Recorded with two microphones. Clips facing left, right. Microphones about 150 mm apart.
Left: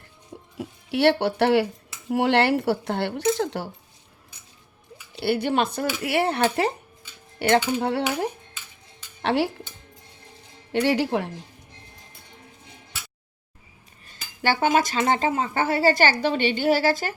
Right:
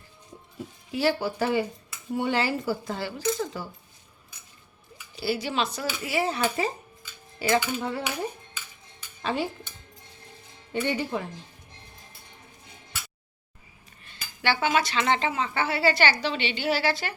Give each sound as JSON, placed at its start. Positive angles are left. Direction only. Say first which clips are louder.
{"t": 0.5, "sound": "speech", "louder": "left 6 dB", "side_deg": 85}
{"t": 2.0, "sound": "speech", "louder": "left 6 dB", "side_deg": 90}
{"t": 5.2, "sound": "speech", "louder": "left 5 dB", "side_deg": 60}
{"t": 10.7, "sound": "speech", "louder": "left 6 dB", "side_deg": 85}
{"t": 14.1, "sound": "speech", "louder": "left 3 dB", "side_deg": 45}